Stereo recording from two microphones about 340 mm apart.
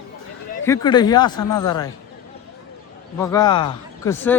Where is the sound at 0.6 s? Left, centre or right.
Centre.